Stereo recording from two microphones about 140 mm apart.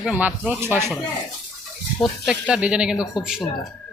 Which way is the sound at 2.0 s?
5° right (ahead or behind).